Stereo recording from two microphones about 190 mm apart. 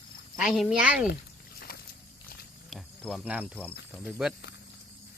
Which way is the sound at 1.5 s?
55° left (ahead or behind).